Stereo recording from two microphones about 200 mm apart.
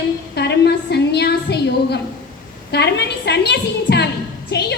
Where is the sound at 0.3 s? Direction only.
55° left (ahead or behind).